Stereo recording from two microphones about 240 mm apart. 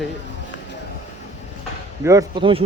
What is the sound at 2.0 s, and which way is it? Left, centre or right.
Speech, centre.